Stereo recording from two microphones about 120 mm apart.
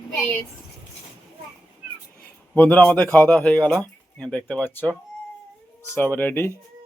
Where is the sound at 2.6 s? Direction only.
15° left (ahead or behind).